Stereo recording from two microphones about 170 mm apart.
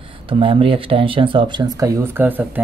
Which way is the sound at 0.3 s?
30° right (ahead or behind).